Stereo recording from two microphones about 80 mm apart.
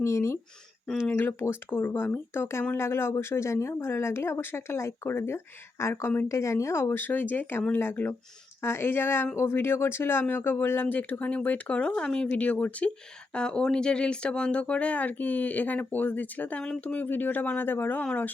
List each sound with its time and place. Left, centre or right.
0.0 s speech: left
1.0 s speech: left
6.2 s speech: left; by 18.3 s centre